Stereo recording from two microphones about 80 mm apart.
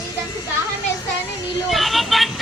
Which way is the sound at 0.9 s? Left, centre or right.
Left.